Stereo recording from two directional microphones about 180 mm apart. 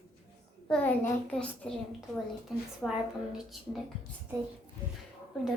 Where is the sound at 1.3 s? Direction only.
5° left (ahead or behind).